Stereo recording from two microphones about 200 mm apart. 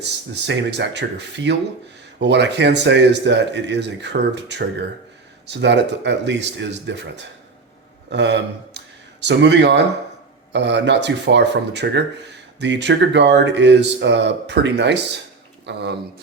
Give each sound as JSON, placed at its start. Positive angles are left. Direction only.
{"t": 0.4, "sound": "speech", "side_deg": -60}
{"t": 8.1, "sound": "speech", "side_deg": -60}